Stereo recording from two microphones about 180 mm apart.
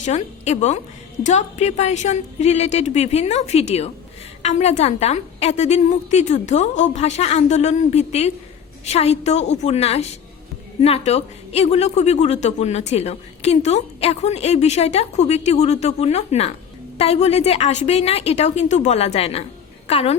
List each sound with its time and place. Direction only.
0.0 s speech: 40° left (ahead or behind)